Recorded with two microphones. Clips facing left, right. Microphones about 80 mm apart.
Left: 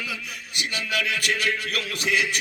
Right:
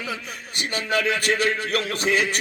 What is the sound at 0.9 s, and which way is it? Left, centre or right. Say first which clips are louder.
Speech: right 5 dB; right.